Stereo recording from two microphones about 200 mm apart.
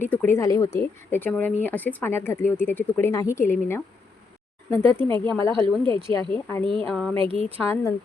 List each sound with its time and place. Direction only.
0.1 s speech: 10° left (ahead or behind)
6.8 s a sound: centre (ahead or behind)
7.2 s speech: 25° right (ahead or behind)
7.6 s speech: 10° left (ahead or behind)